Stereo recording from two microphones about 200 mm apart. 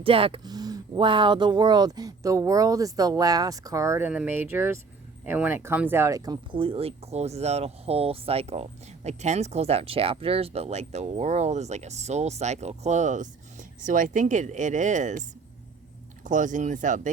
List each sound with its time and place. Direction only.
0.0 s speech: 25° right (ahead or behind)
16.2 s speech: 40° right (ahead or behind)